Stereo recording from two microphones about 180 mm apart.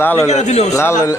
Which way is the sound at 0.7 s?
15° left (ahead or behind).